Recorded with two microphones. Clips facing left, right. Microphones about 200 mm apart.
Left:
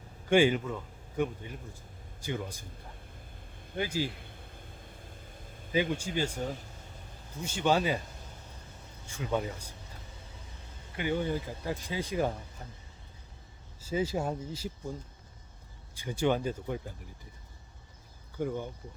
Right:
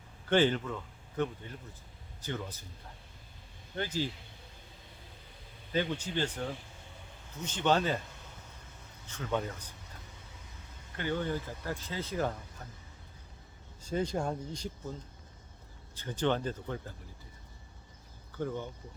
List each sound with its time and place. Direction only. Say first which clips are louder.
0.3 s a man's voice: left 3 dB; 10° left (ahead or behind)
3.8 s speech: left 2 dB; 10° left (ahead or behind)
4.1 s a sound: left 5 dB; 55° left (ahead or behind)
4.9 s vehicle: left 5 dB; 50° left (ahead or behind)
6.1 s speech: left 2 dB; 10° left (ahead or behind)
9.0 s speech: left 2 dB; 10° left (ahead or behind)
10.9 s speech: left 2 dB; 15° left (ahead or behind)
13.8 s speech: left 1 dB; 5° left (ahead or behind)
16.0 s speech: left 2 dB; 10° left (ahead or behind)
18.3 s speech: left 2 dB; 10° left (ahead or behind)